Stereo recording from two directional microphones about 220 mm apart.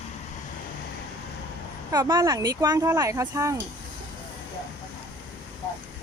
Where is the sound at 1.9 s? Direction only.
15° right (ahead or behind).